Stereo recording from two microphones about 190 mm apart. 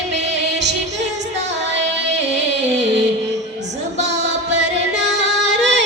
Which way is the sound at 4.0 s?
65° right (ahead or behind).